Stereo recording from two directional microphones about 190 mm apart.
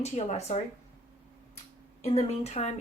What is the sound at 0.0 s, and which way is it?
Speech, 35° left (ahead or behind).